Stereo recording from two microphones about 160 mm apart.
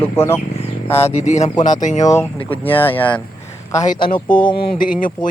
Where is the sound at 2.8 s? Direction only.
10° left (ahead or behind).